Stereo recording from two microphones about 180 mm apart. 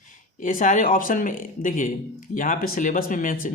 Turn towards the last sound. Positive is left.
turn(degrees=50)  # may be behind; listen again after turning